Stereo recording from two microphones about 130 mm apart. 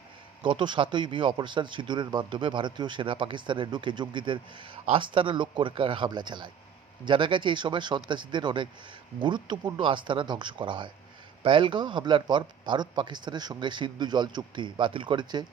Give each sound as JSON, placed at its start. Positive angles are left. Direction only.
{"t": 0.4, "sound": "speech", "side_deg": -40}